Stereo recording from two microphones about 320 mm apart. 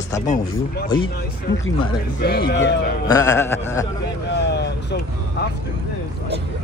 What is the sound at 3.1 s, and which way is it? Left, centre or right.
Speech, centre.